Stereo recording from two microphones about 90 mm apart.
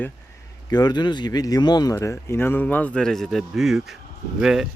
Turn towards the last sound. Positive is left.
turn(degrees=-5)  # may be behind; listen again after turning